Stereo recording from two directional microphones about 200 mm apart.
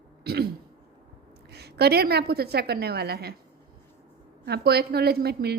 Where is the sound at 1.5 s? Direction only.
55° right (ahead or behind).